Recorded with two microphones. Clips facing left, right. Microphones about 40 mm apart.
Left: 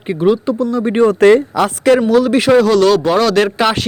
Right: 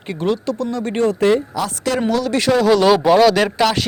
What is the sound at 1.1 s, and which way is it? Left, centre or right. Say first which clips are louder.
Speech: left 7 dB; left.